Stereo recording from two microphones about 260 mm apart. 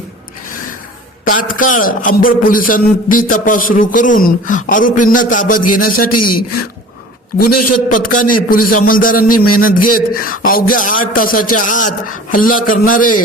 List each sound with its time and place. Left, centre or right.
1.2 s a man's voice: left
5.9 s a man's voice: left
7.9 s a man's voice: left